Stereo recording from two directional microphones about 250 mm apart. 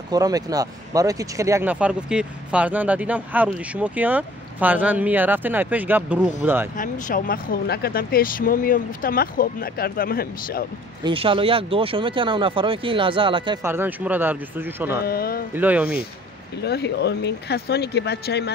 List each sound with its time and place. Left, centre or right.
0.1 s speech: centre
6.8 s speech: left
11.1 s speech: right
15.0 s speech: left
15.5 s speech: centre
16.6 s speech: left